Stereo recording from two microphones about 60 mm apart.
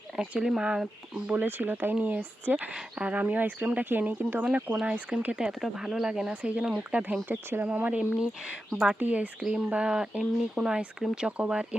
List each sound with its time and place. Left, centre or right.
0.2 s speech: centre
1.4 s speech: right
5.2 s speech: centre
7.3 s speech: right
7.7 s speech: right
8.7 s speech: centre
9.0 s speech: right
9.4 s speech: centre